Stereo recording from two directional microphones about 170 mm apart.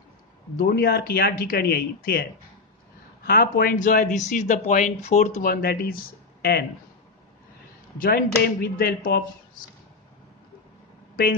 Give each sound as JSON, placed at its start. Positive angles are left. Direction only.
{"t": 0.6, "sound": "speech", "side_deg": 60}
{"t": 3.3, "sound": "speech", "side_deg": 60}
{"t": 5.4, "sound": "speech", "side_deg": 65}
{"t": 8.0, "sound": "speech", "side_deg": 60}